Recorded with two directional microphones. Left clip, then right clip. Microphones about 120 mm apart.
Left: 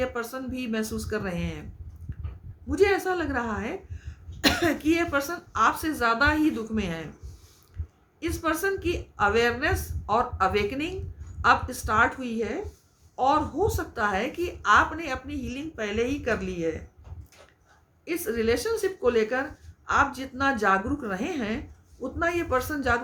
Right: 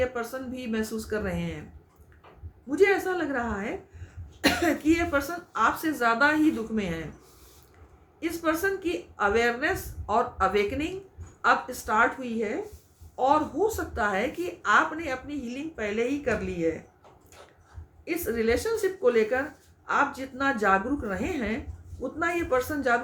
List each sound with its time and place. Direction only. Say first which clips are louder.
0.0 s a woman's voice: right 1 dB; 40° left (ahead or behind)
2.6 s a woman's voice: even; 40° left (ahead or behind)
8.2 s a woman's voice: even; 35° left (ahead or behind)
18.0 s a woman's voice: even; 35° left (ahead or behind)